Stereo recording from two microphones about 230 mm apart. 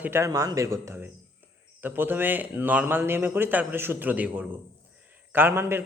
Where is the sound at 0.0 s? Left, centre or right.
Centre.